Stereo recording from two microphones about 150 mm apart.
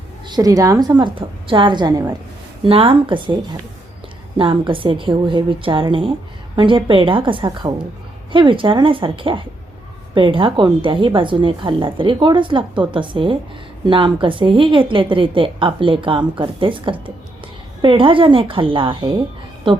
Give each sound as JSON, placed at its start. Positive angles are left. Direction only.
{"t": 0.3, "sound": "a woman's voice", "side_deg": -25}
{"t": 2.6, "sound": "a woman's voice", "side_deg": -40}
{"t": 4.4, "sound": "a woman's voice", "side_deg": -35}